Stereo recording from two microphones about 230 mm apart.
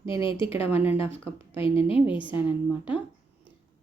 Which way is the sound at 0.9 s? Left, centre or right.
Left.